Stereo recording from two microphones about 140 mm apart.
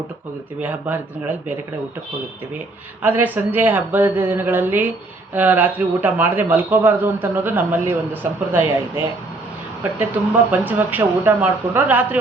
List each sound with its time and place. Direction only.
0.6 s a man's voice: 10° right (ahead or behind)
3.0 s a man's voice: 10° right (ahead or behind)
10.0 s a man's voice: 10° right (ahead or behind)